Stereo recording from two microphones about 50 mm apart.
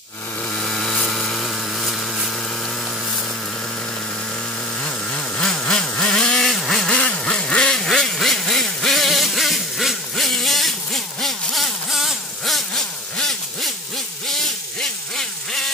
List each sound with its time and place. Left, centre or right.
0.6 s a sound: centre
4.8 s vehicle: centre
6.9 s quack: left
7.7 s music: centre
14.2 s vehicle: centre